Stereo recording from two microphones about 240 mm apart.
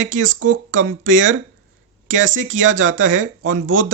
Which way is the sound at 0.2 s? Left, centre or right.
Right.